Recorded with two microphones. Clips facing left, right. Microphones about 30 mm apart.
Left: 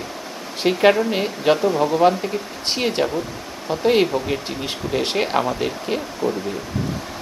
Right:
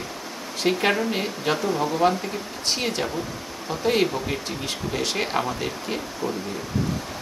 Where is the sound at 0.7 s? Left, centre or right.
Centre.